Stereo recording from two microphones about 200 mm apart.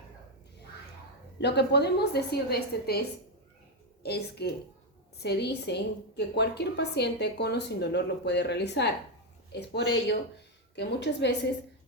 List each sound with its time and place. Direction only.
1.4 s a woman's voice: 55° left (ahead or behind)
4.0 s a woman's voice: 55° left (ahead or behind)